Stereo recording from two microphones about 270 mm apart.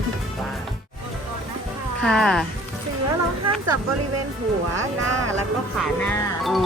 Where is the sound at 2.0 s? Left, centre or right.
Centre.